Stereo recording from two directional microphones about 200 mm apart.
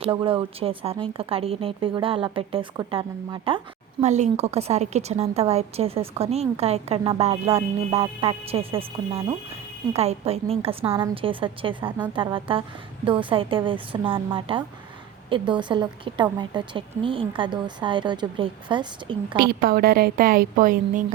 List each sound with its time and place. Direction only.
0.0 s a woman's voice: 25° right (ahead or behind)
4.0 s a woman's voice: 35° right (ahead or behind)
19.4 s a woman's voice: 50° right (ahead or behind)